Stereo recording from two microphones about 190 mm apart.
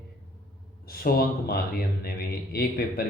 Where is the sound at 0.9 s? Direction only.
50° left (ahead or behind).